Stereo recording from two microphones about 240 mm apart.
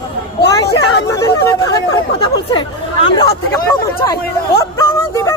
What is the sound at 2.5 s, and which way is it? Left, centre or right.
Speech, left.